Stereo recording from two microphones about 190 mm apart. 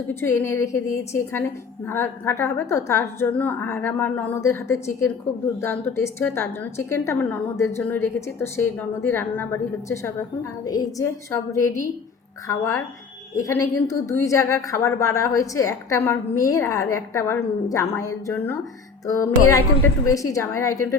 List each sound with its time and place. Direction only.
0.1 s a woman's voice: 10° left (ahead or behind)